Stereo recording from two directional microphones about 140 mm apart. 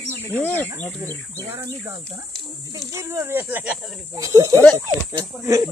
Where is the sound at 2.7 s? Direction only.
20° right (ahead or behind).